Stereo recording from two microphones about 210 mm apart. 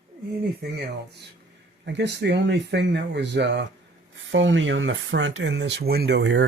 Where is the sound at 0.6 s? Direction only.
50° right (ahead or behind).